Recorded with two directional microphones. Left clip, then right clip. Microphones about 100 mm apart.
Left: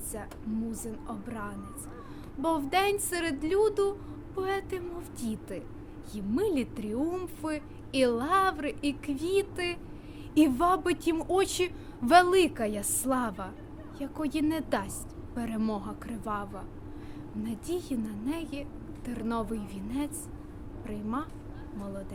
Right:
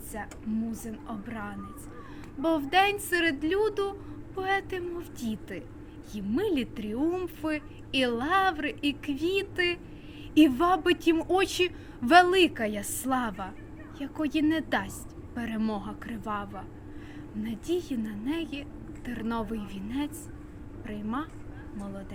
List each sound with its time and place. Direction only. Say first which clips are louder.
0.7 s a woman's voice: even; 40° left (ahead or behind)